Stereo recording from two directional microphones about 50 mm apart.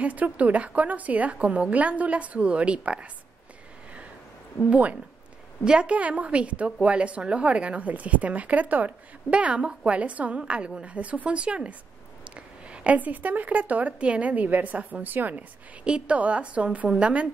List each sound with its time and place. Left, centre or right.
0.0 s a woman's voice: right
4.6 s a woman's voice: right
5.6 s a woman's voice: centre; by 15.4 s right
15.8 s a woman's voice: right